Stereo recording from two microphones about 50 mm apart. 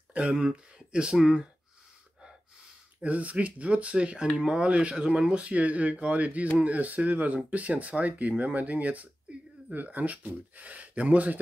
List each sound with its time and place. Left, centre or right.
0.1 s speech: right
3.0 s speech: right